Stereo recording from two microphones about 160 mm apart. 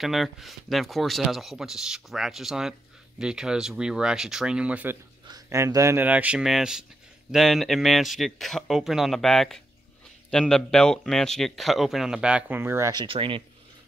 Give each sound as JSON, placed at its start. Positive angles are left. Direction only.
{"t": 0.0, "sound": "speech", "side_deg": 0}
{"t": 5.2, "sound": "speech", "side_deg": -20}
{"t": 12.9, "sound": "speech", "side_deg": -35}